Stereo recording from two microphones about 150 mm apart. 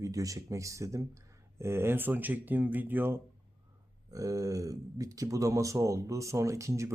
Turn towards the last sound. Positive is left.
turn(degrees=-20)  # may be behind; listen again after turning